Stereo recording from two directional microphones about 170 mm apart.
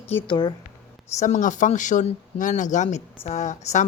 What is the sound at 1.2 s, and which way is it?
A woman's voice, 50° left (ahead or behind).